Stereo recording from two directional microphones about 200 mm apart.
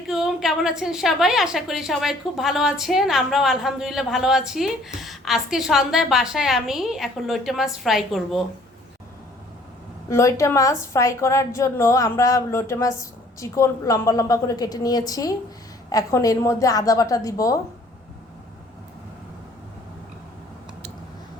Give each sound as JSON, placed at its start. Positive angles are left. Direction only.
{"t": 0.1, "sound": "a woman's voice", "side_deg": 0}
{"t": 10.1, "sound": "a woman's voice", "side_deg": 15}